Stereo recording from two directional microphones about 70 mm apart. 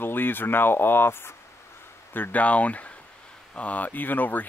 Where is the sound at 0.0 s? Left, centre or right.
Left.